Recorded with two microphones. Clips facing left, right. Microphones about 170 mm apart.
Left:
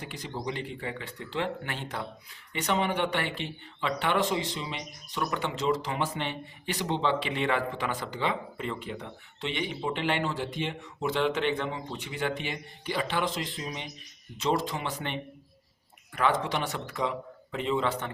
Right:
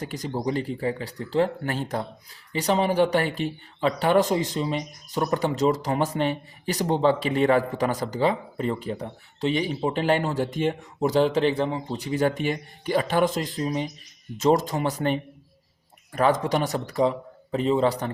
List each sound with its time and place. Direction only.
0.0 s speech: 40° right (ahead or behind)